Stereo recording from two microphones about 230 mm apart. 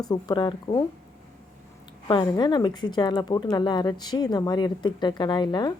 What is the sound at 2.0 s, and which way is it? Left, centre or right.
A woman's voice, centre.